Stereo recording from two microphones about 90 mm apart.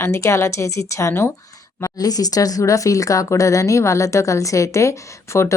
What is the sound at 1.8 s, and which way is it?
Speech, 45° left (ahead or behind).